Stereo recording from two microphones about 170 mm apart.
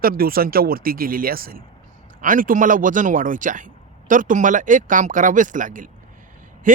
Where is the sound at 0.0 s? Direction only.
60° right (ahead or behind).